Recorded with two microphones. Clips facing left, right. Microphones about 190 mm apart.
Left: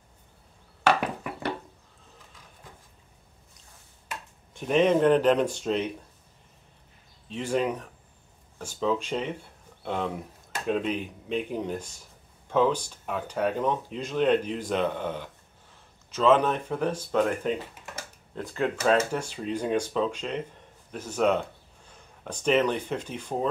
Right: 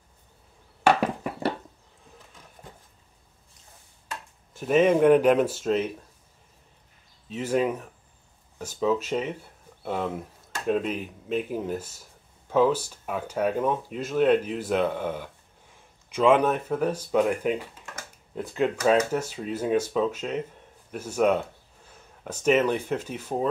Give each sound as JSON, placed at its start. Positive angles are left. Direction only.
{"t": 1.0, "sound": "a sound", "side_deg": -35}
{"t": 4.6, "sound": "speech", "side_deg": -5}
{"t": 7.2, "sound": "speech", "side_deg": -5}